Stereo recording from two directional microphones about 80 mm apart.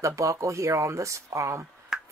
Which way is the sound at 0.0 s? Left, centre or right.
Right.